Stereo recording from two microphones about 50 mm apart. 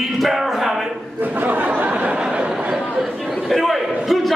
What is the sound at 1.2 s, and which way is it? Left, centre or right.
Speech, right.